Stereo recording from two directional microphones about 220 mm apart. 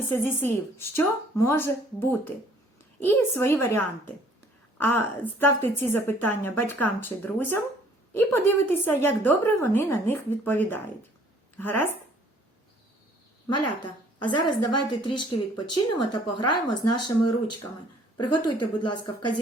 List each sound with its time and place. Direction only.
0.1 s a woman's voice: 10° left (ahead or behind)
13.5 s speech: 90° left
14.8 s speech: 20° left (ahead or behind)
16.0 s speech: 90° left
18.2 s speech: 90° left